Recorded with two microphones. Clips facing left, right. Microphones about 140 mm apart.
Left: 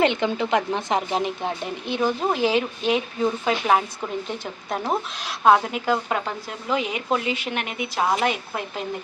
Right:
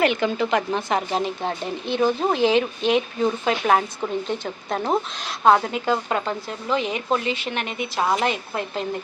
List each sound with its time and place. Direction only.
0.0 s speech: 20° left (ahead or behind)